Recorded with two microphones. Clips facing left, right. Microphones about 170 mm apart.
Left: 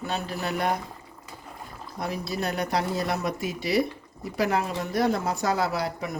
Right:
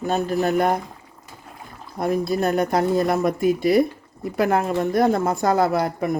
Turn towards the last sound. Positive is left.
turn(degrees=-50)  # may be behind; listen again after turning